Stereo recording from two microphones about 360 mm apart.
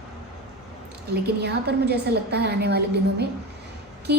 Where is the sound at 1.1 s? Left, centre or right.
Right.